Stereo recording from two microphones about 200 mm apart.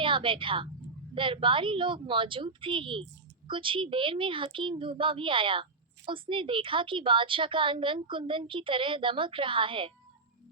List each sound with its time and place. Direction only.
0.0 s a woman's voice: 25° right (ahead or behind)